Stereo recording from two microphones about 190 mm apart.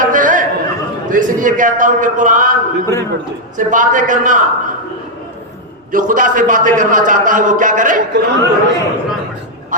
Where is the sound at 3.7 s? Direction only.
45° right (ahead or behind).